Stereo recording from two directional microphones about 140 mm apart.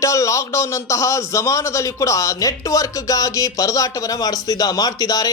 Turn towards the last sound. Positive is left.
turn(degrees=25)  # may be behind; listen again after turning